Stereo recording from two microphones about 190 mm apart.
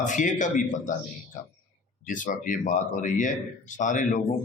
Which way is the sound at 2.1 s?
45° left (ahead or behind).